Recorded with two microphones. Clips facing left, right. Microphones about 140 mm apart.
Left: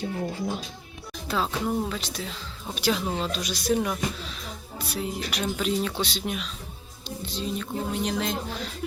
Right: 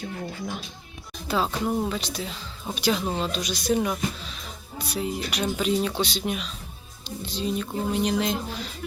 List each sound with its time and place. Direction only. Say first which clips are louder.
0.0 s speech: left 4 dB; 25° left (ahead or behind)
1.3 s speech: right 2 dB; 5° right (ahead or behind)